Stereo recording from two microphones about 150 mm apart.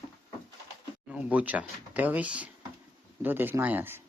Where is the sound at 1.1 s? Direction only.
10° right (ahead or behind).